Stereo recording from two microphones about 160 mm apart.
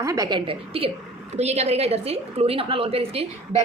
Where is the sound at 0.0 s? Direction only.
20° right (ahead or behind).